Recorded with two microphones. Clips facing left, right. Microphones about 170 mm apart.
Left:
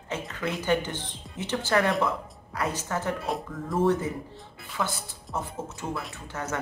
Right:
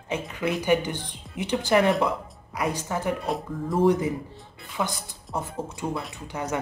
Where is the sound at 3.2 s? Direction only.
Centre (ahead or behind).